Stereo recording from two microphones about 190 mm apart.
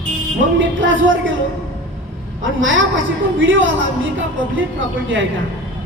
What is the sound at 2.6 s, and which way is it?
Speech, 90° right.